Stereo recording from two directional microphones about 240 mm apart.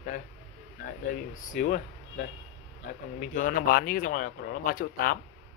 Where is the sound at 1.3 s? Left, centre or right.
Left.